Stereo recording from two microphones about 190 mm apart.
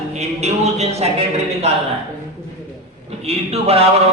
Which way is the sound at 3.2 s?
35° right (ahead or behind).